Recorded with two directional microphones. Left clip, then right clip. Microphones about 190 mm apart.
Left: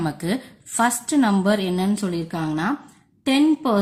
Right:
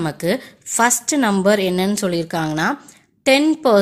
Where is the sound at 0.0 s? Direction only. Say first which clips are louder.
Right 5 dB; 30° right (ahead or behind).